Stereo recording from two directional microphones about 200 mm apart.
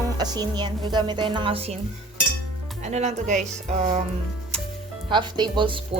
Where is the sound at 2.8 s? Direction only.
35° right (ahead or behind).